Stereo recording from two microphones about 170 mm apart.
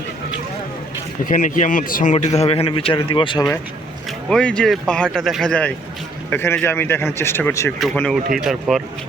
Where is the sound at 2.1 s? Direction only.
40° left (ahead or behind).